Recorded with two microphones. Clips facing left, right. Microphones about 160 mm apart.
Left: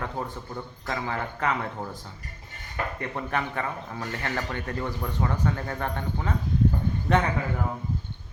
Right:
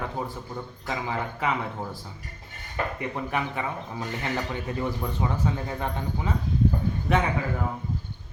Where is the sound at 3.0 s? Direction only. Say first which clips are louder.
Left 2 dB; 10° right (ahead or behind).